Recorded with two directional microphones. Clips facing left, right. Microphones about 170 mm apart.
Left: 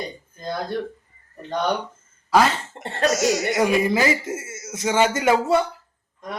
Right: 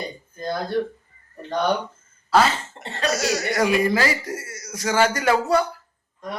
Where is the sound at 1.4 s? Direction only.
20° left (ahead or behind).